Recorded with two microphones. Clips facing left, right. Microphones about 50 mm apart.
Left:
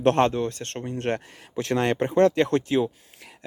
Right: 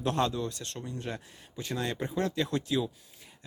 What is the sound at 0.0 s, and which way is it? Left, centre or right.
Speech, left.